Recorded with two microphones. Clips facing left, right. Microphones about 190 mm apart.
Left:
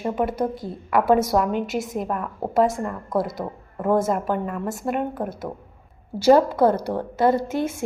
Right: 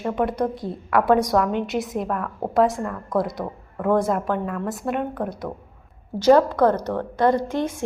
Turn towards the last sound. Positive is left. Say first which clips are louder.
# even
turn(degrees=5)  # may be behind; listen again after turning